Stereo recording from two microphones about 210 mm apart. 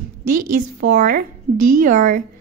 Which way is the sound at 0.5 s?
40° right (ahead or behind).